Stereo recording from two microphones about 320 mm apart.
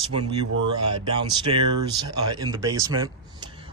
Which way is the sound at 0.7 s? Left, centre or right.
Right.